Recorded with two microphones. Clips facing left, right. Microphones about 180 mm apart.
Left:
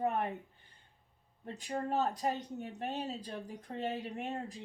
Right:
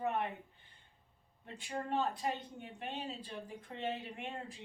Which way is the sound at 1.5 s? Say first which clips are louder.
Left 3 dB; 40° left (ahead or behind).